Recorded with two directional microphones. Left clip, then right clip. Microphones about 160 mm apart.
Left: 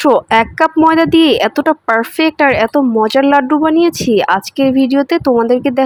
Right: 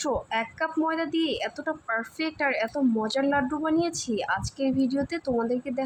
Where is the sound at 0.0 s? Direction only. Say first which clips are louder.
Left 18 dB; 60° left (ahead or behind).